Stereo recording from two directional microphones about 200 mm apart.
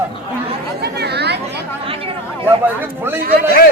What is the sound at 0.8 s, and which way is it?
Speech, 55° right (ahead or behind).